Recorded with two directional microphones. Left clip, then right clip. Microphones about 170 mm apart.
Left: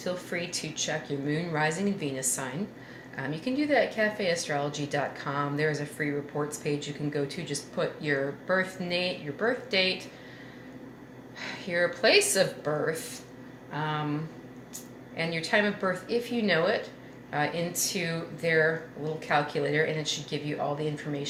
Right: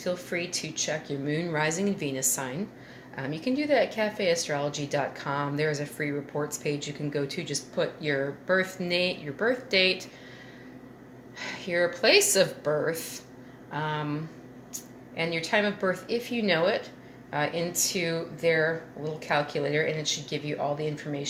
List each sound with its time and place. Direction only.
0.0 s a woman's voice: 30° right (ahead or behind)
11.3 s a woman's voice: 35° right (ahead or behind)